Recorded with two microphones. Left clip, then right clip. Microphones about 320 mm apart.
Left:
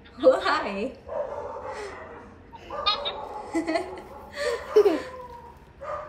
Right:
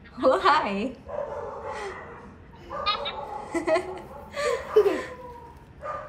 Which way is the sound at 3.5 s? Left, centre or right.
Centre.